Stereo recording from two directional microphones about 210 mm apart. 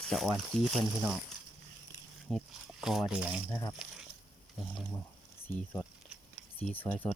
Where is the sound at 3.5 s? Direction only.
15° left (ahead or behind).